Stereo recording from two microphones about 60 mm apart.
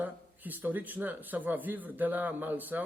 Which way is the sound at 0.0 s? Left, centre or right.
Right.